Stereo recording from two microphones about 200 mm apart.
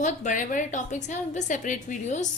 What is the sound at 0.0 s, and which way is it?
A woman's voice, 40° left (ahead or behind).